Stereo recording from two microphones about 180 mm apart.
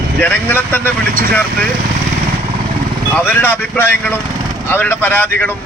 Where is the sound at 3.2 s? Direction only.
10° left (ahead or behind).